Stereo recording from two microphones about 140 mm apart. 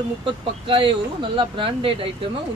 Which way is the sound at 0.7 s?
35° right (ahead or behind).